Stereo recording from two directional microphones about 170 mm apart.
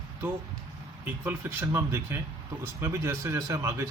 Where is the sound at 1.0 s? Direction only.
10° right (ahead or behind).